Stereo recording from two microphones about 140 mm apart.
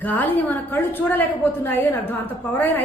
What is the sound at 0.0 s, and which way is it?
A woman's voice, 15° left (ahead or behind).